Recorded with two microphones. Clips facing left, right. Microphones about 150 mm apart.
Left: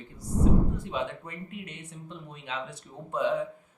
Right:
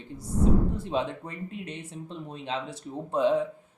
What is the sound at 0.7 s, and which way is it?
Speech, 30° right (ahead or behind).